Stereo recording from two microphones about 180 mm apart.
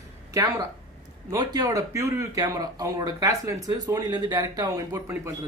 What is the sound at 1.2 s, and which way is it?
Speech, 20° right (ahead or behind).